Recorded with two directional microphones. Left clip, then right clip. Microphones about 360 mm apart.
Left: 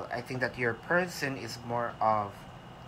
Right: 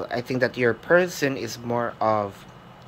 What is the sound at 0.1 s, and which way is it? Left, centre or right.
Speech, centre.